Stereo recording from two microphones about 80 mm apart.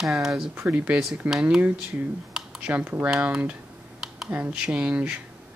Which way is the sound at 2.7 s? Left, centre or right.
Right.